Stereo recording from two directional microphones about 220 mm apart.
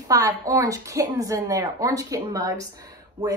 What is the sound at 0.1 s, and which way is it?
A woman's voice, 15° right (ahead or behind).